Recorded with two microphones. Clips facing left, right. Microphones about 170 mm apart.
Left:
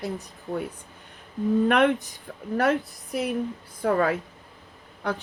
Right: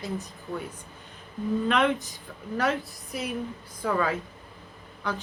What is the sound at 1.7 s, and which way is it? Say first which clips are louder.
A woman's voice: left 4 dB; 55° left (ahead or behind).